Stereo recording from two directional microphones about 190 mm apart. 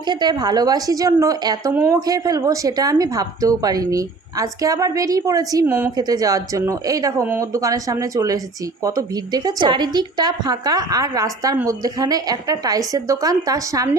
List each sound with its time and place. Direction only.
0.1 s a woman's voice: 20° right (ahead or behind)